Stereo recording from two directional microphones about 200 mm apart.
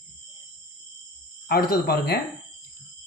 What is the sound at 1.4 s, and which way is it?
Speech, 50° left (ahead or behind).